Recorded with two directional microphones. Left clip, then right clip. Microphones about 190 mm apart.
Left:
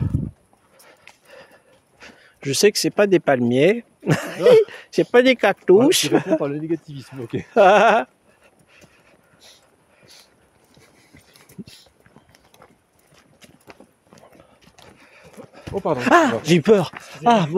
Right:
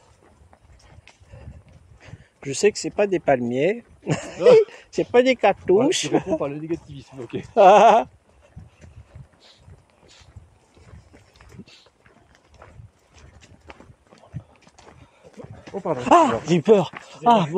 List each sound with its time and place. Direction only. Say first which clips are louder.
2.0 s speech: left 4 dB; 35° left (ahead or behind)
6.4 s speech: left 3 dB; 70° left (ahead or behind)
7.5 s speech: right 1 dB; 35° left (ahead or behind)
15.7 s speech: left 4 dB; 55° left (ahead or behind)
16.0 s speech: even; 35° left (ahead or behind)
17.1 s speech: even; 25° left (ahead or behind)